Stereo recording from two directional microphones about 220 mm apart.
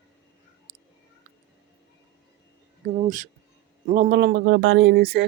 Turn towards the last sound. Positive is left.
turn(degrees=-50)  # may be behind; listen again after turning